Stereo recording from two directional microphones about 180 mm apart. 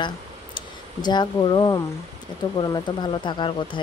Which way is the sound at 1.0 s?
25° left (ahead or behind).